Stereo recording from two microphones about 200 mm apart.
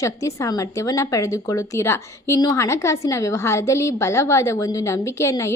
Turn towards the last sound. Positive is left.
turn(degrees=15)  # may be behind; listen again after turning